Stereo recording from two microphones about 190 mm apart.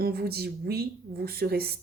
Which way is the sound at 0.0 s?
55° right (ahead or behind).